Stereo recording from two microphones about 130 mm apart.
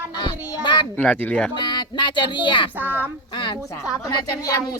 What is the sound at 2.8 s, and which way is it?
Speech, 15° right (ahead or behind).